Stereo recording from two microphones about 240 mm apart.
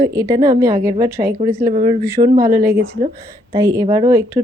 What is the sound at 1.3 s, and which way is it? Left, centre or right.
Speech, right.